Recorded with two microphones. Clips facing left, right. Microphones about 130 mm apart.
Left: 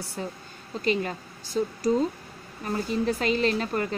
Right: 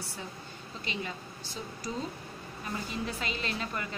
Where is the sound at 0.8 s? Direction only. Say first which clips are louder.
Left 12 dB; 45° left (ahead or behind).